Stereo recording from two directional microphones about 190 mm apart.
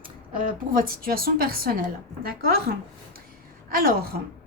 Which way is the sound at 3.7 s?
50° right (ahead or behind).